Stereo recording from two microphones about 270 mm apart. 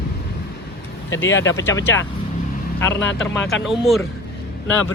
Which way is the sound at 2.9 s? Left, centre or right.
Left.